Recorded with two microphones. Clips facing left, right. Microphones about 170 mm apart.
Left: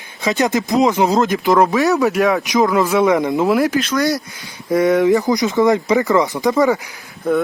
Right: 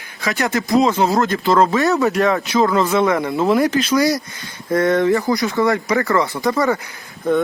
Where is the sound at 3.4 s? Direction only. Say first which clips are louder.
Even; centre (ahead or behind).